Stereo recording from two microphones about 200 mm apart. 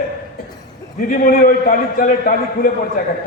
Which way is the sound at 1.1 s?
45° left (ahead or behind).